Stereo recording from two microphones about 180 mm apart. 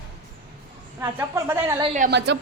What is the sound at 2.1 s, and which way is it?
Speech, 75° right (ahead or behind).